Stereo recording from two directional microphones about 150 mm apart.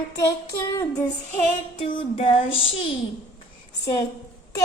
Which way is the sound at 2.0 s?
35° left (ahead or behind).